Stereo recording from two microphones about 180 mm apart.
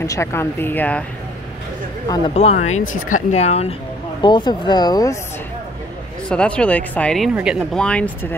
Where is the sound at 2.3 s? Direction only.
40° left (ahead or behind).